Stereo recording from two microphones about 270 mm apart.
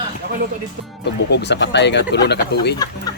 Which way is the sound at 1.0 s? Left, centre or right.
Left.